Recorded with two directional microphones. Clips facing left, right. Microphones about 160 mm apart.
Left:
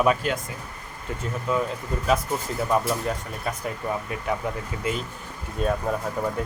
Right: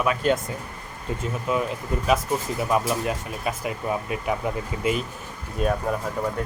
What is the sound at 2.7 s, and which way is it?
Speech, 10° right (ahead or behind).